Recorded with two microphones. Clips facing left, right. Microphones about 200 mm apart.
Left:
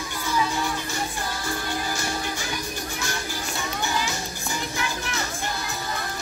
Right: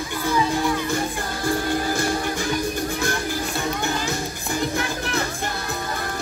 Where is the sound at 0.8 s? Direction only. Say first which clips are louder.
Right 5 dB; 55° right (ahead or behind).